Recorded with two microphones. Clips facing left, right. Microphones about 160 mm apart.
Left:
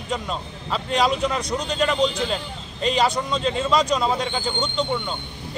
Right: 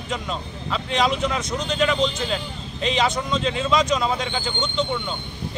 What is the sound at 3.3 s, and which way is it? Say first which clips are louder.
Speech: even; centre (ahead or behind).